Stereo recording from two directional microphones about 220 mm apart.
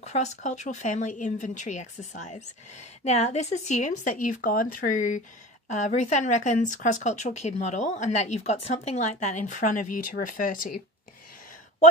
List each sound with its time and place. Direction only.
0.0 s speech: 30° left (ahead or behind)